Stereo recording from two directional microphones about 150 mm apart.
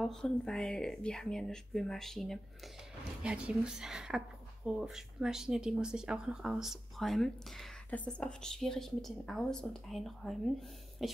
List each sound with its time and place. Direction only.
0.0 s speech: 5° left (ahead or behind)